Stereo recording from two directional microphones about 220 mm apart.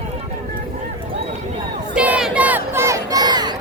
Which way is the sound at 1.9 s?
5° right (ahead or behind).